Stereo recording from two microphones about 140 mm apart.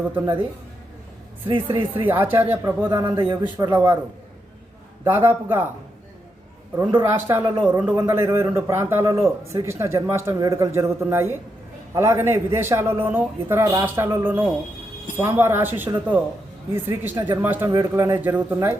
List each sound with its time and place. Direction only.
1.5 s speech: 35° right (ahead or behind)
2.0 s a man's voice: 15° right (ahead or behind)
5.0 s a man's voice: 15° right (ahead or behind)
7.0 s a man's voice: 15° right (ahead or behind)
17.7 s a man's voice: 25° right (ahead or behind)